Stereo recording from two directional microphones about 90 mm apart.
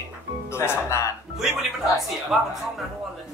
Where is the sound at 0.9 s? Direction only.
35° left (ahead or behind).